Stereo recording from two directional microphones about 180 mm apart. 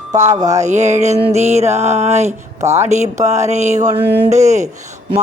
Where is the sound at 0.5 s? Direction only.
40° right (ahead or behind).